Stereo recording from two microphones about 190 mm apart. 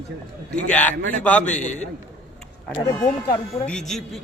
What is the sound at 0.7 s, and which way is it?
A man's voice, 10° left (ahead or behind).